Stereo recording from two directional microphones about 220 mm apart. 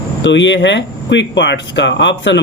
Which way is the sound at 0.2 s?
55° left (ahead or behind).